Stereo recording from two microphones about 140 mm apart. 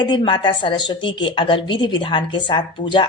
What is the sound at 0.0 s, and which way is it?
A woman's voice, 30° left (ahead or behind).